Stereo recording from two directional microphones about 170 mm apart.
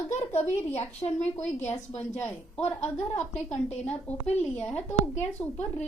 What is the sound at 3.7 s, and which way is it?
Speech, 40° left (ahead or behind).